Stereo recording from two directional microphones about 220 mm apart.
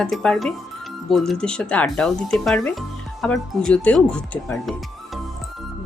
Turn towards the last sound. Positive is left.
turn(degrees=5)  # may be behind; listen again after turning